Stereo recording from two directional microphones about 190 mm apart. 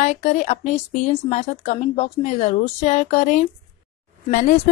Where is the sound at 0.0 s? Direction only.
35° left (ahead or behind).